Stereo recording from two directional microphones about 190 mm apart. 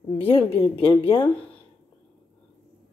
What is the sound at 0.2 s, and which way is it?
A woman's voice, 30° left (ahead or behind).